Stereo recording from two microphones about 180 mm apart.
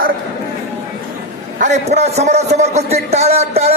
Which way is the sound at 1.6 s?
40° right (ahead or behind).